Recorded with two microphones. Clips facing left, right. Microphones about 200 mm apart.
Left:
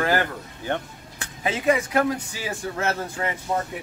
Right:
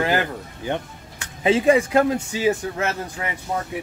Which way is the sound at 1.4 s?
30° right (ahead or behind).